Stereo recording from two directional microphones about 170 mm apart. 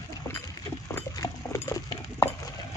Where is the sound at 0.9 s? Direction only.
15° left (ahead or behind).